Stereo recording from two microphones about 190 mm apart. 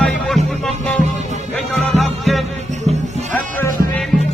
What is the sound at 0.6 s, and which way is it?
Music, 5° left (ahead or behind).